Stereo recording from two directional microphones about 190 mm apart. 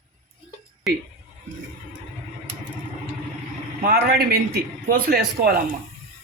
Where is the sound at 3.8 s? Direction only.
50° right (ahead or behind).